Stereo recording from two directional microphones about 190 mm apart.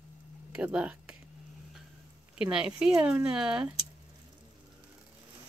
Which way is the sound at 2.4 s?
5° right (ahead or behind).